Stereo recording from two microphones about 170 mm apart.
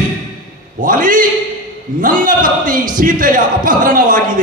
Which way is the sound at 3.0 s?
55° right (ahead or behind).